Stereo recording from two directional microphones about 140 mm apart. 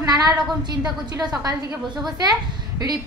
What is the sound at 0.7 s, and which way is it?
Speech, 30° right (ahead or behind).